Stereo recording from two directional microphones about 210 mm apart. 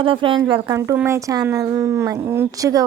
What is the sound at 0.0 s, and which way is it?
Speech, 25° right (ahead or behind).